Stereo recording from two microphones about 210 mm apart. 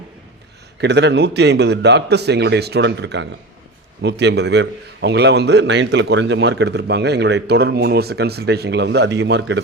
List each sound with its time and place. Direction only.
0.8 s a man's voice: 55° right (ahead or behind)